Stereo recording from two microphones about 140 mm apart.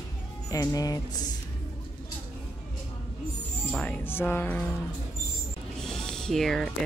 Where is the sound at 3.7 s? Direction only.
10° left (ahead or behind).